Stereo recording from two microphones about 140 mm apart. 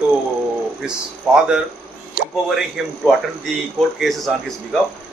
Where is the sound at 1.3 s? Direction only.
5° right (ahead or behind).